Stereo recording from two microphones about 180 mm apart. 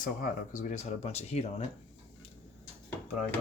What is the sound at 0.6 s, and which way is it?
Speech, 40° left (ahead or behind).